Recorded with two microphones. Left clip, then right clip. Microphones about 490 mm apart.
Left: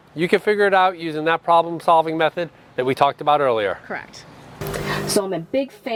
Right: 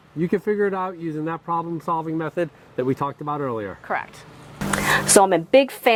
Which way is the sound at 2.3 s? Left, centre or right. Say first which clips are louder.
Left 1 dB; left.